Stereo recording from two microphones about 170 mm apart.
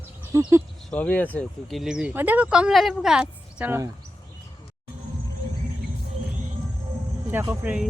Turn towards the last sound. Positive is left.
turn(degrees=-5)  # may be behind; listen again after turning